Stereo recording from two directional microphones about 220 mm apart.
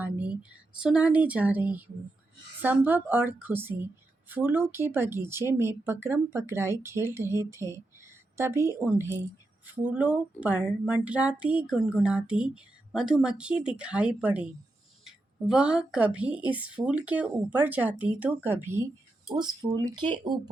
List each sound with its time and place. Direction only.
0.0 s a woman's voice: 5° right (ahead or behind)